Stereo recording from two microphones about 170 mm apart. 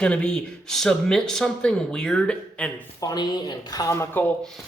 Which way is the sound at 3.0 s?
25° left (ahead or behind).